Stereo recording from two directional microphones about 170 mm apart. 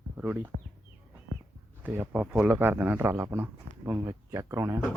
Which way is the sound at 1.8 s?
10° right (ahead or behind).